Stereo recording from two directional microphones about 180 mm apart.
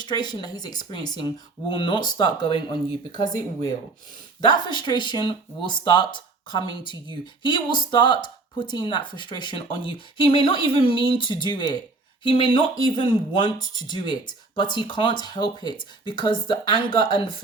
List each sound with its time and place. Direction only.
0.0 s speech: 25° left (ahead or behind)